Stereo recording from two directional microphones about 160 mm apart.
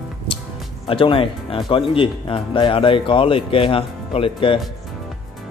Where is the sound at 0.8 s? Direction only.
35° left (ahead or behind).